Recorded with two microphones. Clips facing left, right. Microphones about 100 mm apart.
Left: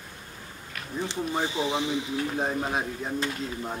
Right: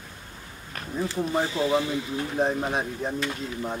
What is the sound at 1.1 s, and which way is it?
Speech, 20° left (ahead or behind).